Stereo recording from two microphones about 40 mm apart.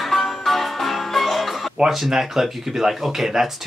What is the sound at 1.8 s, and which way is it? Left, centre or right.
Speech, centre.